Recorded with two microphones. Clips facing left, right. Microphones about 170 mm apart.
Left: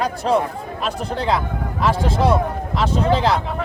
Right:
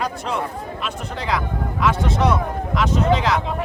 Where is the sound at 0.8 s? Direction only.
35° left (ahead or behind).